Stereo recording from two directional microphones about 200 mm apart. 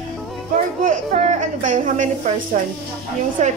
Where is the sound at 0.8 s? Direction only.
40° right (ahead or behind).